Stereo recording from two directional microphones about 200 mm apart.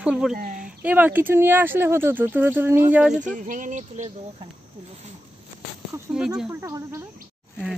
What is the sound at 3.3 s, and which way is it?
Speech, 40° right (ahead or behind).